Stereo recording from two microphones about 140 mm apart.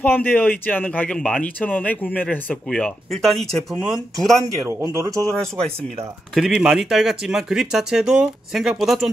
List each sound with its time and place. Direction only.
0.0 s speech: 15° left (ahead or behind)
4.4 s speech: 20° right (ahead or behind)
6.3 s speech: 5° right (ahead or behind)